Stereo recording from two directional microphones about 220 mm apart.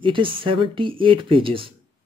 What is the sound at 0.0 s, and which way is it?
Speech, 25° right (ahead or behind).